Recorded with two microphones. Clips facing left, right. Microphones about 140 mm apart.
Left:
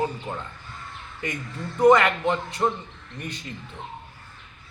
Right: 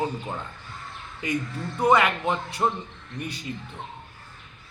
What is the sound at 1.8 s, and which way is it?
Speech, 10° right (ahead or behind).